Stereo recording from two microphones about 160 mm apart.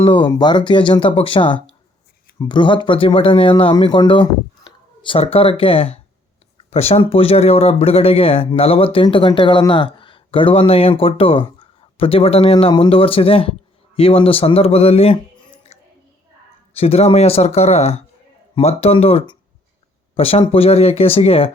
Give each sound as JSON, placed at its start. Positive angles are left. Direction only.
{"t": 0.0, "sound": "speech", "side_deg": 30}